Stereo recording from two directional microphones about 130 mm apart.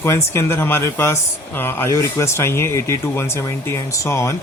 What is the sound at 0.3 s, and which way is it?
Speech, 20° left (ahead or behind).